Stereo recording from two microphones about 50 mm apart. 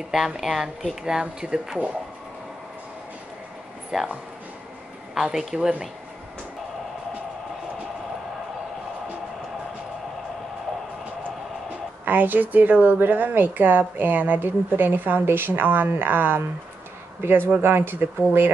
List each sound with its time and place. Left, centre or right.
0.4 s speech: centre
3.9 s speech: centre
5.1 s speech: centre
12.0 s a woman's voice: right